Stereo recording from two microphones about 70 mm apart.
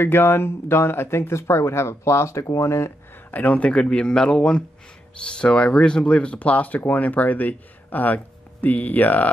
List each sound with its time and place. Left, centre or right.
0.0 s speech: left
3.3 s speech: left